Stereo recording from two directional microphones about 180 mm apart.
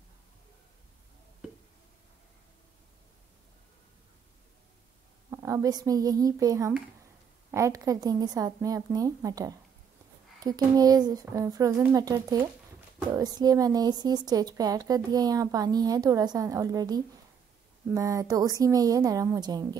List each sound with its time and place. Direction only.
5.3 s a woman's voice: 20° right (ahead or behind)